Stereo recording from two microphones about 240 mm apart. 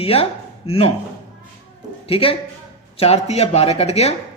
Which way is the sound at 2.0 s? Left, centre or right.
Left.